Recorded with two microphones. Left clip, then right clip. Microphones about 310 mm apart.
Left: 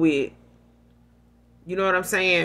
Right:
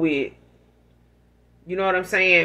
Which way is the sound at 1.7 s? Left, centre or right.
Left.